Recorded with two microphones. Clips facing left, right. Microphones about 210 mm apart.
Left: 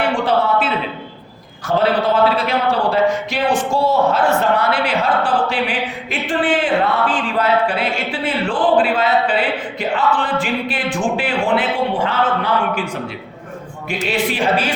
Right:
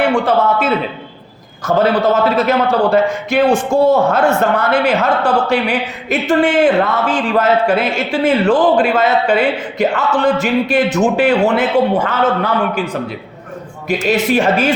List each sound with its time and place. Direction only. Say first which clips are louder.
1.6 s a man's voice: right 3 dB; 45° right (ahead or behind)
13.8 s a man's voice: right 5 dB; 40° right (ahead or behind)